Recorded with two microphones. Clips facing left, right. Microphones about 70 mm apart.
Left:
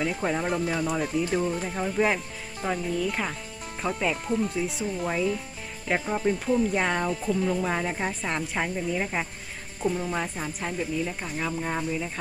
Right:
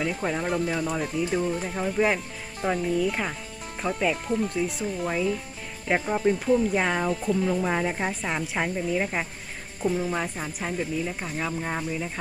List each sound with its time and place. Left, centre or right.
0.0 s speech: centre